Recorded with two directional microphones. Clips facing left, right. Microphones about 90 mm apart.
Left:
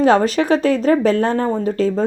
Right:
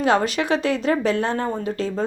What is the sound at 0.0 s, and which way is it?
A woman's voice, 40° left (ahead or behind).